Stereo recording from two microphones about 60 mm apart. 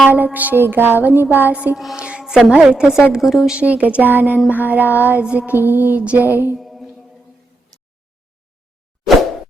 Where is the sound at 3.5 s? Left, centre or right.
Right.